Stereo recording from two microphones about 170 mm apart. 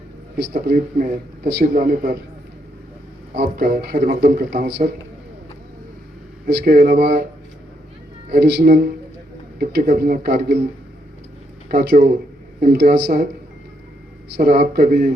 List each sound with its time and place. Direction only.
0.5 s speech: 60° right (ahead or behind)
3.3 s speech: 60° right (ahead or behind)
6.4 s speech: 60° right (ahead or behind)
8.3 s speech: 70° right (ahead or behind)
11.7 s speech: 55° right (ahead or behind)
14.3 s speech: 60° right (ahead or behind)